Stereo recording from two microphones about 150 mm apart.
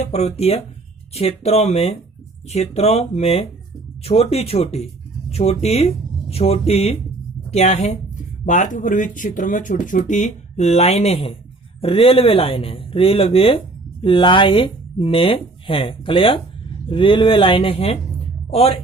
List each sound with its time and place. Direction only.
0.0 s speech: 45° left (ahead or behind)